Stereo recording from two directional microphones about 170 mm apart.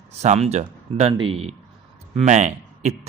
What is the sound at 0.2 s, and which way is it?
A man's voice, 40° right (ahead or behind).